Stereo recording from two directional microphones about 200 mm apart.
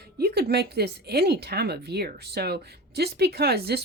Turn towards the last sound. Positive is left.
turn(degrees=-55)  # may be behind; listen again after turning